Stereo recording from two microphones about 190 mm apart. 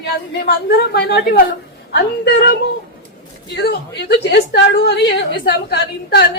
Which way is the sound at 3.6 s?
55° left (ahead or behind).